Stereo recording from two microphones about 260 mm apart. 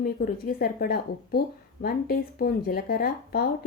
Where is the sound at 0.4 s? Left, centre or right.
Left.